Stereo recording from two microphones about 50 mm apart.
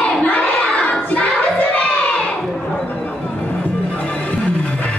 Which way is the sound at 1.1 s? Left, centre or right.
Left.